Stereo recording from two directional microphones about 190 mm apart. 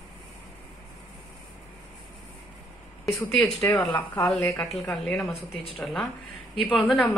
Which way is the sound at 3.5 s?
15° left (ahead or behind).